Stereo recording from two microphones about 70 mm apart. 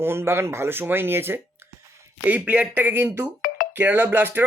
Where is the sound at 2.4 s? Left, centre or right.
Centre.